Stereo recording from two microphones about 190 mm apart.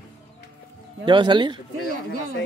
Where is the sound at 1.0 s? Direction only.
25° right (ahead or behind).